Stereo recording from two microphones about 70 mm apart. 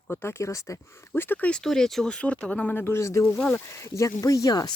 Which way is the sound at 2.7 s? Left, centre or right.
Left.